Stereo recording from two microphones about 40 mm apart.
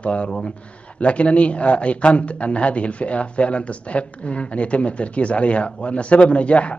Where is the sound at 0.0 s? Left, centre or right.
Left.